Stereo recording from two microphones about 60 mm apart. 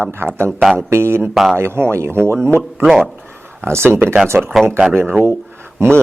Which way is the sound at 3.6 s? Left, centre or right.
Right.